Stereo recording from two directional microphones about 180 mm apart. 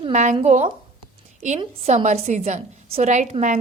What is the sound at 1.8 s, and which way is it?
Speech, 40° right (ahead or behind).